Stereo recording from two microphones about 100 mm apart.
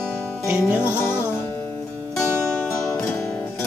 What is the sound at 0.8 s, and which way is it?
Music, 25° left (ahead or behind).